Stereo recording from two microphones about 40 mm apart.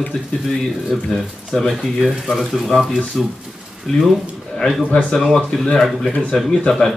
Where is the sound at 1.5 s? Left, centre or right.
Centre.